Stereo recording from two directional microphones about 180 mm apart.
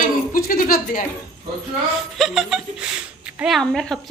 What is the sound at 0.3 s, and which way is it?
Speech, 50° left (ahead or behind).